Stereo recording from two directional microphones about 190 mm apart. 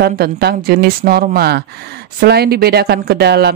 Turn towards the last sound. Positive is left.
turn(degrees=-60)  # may be behind; listen again after turning